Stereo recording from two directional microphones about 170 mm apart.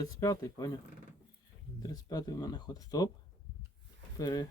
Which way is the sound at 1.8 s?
20° left (ahead or behind).